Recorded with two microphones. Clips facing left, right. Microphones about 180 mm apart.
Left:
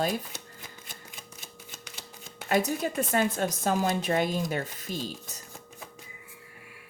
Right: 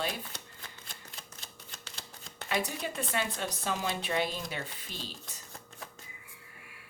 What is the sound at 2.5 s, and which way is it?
Speech, 45° left (ahead or behind).